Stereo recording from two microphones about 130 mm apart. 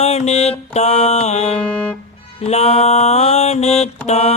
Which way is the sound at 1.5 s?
10° left (ahead or behind).